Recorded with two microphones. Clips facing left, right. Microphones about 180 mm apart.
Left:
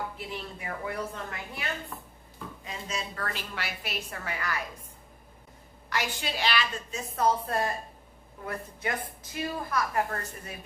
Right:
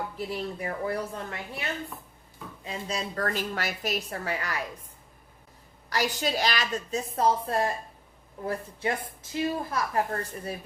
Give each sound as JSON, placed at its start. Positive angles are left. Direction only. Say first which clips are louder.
{"t": 0.2, "sound": "a woman's voice", "louder": "right 6 dB", "side_deg": -40}
{"t": 2.6, "sound": "a woman's voice", "louder": "right 4 dB", "side_deg": -35}
{"t": 5.9, "sound": "a woman's voice", "louder": "right 5 dB", "side_deg": -40}
{"t": 7.2, "sound": "a woman's voice", "louder": "right 1 dB", "side_deg": -30}